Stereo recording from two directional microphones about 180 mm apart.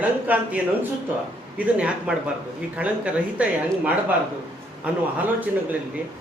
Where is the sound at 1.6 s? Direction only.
5° right (ahead or behind).